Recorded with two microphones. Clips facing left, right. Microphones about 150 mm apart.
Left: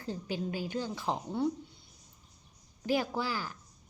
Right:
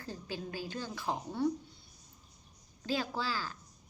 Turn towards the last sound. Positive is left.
turn(degrees=15)  # may be behind; listen again after turning